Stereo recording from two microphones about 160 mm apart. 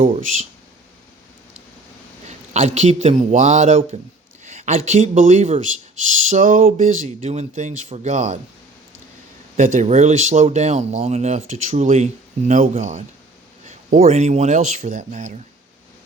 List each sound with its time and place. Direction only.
0.1 s speech: 50° right (ahead or behind)
2.5 s speech: 45° right (ahead or behind)
4.4 s a sound: 45° right (ahead or behind)
4.9 s speech: 50° right (ahead or behind)
7.2 s speech: 45° right (ahead or behind)
9.6 s speech: 50° right (ahead or behind)